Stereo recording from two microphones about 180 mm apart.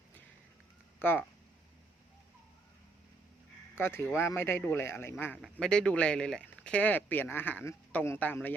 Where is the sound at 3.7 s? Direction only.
15° left (ahead or behind).